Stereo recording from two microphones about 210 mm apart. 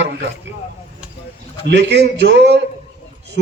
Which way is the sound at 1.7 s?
55° right (ahead or behind).